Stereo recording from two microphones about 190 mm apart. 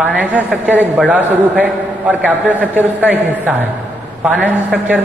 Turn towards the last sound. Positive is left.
turn(degrees=-10)  # may be behind; listen again after turning